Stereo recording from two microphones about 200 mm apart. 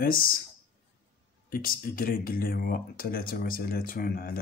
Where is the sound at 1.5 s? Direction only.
45° left (ahead or behind).